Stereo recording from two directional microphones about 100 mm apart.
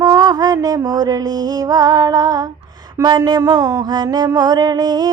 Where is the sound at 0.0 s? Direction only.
35° right (ahead or behind).